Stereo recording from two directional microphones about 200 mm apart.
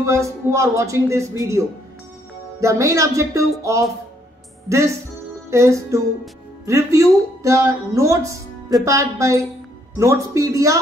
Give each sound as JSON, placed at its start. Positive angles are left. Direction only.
{"t": 0.0, "sound": "speech", "side_deg": -15}
{"t": 2.6, "sound": "speech", "side_deg": -15}